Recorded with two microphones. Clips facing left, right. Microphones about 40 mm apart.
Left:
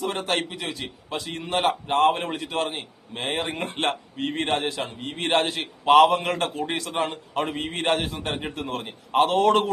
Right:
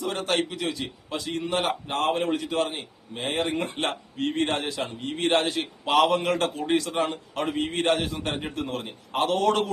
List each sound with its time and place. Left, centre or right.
0.0 s a man's voice: left
6.1 s a man's voice: centre
6.7 s a man's voice: left